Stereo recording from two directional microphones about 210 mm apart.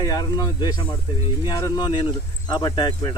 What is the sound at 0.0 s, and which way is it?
Speech, 20° left (ahead or behind).